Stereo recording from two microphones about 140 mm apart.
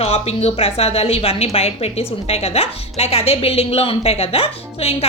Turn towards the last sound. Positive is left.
turn(degrees=45)  # may be behind; listen again after turning